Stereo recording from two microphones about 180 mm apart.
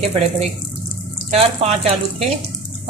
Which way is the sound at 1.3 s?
35° right (ahead or behind).